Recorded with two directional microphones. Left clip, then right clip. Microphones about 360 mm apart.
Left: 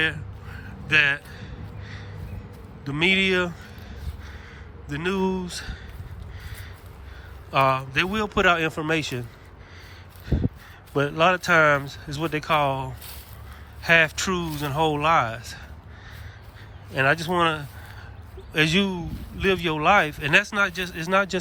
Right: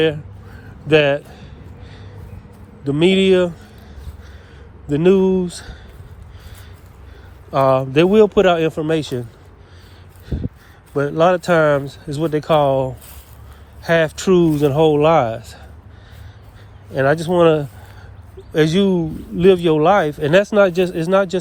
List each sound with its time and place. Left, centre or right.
0.9 s a sound: centre
2.8 s a man's voice: centre
4.9 s a man's voice: centre
7.5 s a man's voice: centre
10.3 s speech: right
10.9 s a man's voice: centre
16.9 s a man's voice: centre